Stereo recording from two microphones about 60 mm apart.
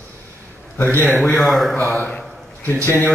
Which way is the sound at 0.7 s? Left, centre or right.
Left.